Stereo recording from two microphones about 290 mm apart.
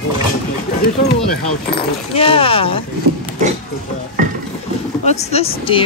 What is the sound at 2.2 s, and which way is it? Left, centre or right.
Speech, centre.